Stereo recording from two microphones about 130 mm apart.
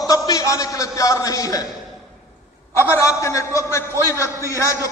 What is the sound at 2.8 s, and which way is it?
A man's voice, 25° left (ahead or behind).